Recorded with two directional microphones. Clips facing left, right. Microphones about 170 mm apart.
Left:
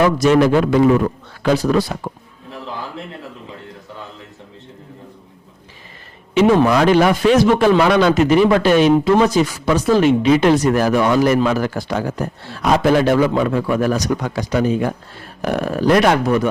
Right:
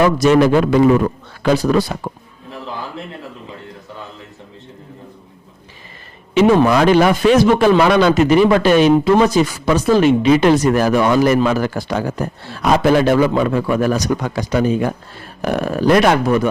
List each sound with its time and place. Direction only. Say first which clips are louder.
0.0 s a man's voice: right 1 dB; 25° right (ahead or behind)
2.7 s a sound: right 1 dB; 20° right (ahead or behind)
6.5 s a man's voice: right 1 dB; 20° right (ahead or behind)
10.0 s a man's voice: right 1 dB; 15° right (ahead or behind)